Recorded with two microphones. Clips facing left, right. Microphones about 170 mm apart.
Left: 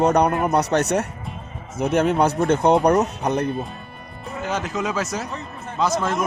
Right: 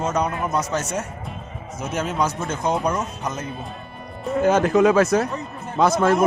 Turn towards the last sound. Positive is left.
turn(degrees=-55)  # may be behind; listen again after turning